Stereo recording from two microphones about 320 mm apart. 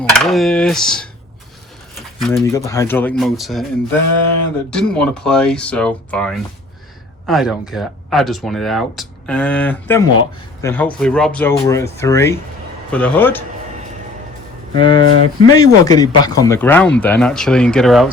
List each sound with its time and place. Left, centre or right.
0.0 s speech: centre
2.0 s pigeon: centre
2.4 s speech: centre
4.7 s speech: centre
14.7 s speech: centre